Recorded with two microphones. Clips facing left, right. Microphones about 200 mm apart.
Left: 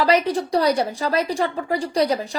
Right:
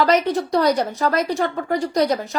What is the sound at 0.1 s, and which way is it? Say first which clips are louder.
Speech: right 1 dB; 15° left (ahead or behind).